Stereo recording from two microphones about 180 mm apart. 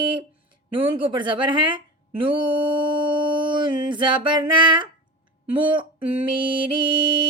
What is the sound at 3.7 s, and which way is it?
Speech, 25° right (ahead or behind).